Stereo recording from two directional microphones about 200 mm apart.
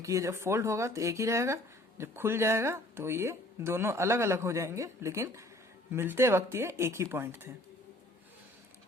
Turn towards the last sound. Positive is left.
turn(degrees=-10)  # may be behind; listen again after turning